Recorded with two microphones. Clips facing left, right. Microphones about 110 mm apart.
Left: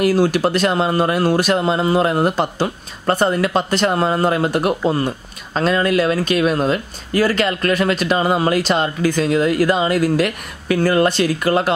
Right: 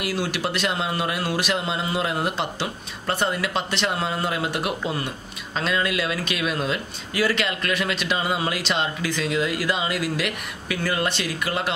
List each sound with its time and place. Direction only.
0.0 s speech: 40° left (ahead or behind)